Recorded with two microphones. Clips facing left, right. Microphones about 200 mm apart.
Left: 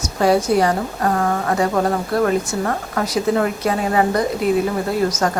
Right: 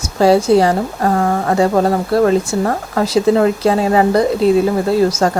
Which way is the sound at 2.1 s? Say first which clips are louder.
Right 6 dB; 30° right (ahead or behind).